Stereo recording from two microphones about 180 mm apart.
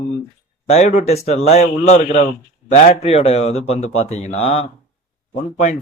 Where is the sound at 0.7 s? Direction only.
45° left (ahead or behind).